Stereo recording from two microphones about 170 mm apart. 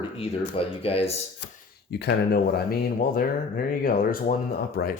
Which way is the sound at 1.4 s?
90° left.